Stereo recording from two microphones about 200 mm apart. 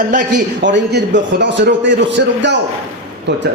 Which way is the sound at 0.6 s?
60° right (ahead or behind).